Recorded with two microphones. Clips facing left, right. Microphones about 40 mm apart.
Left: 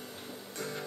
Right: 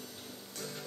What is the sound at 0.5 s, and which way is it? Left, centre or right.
Music, left.